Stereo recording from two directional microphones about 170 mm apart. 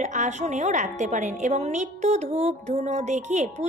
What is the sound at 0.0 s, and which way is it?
A woman's voice, 45° right (ahead or behind).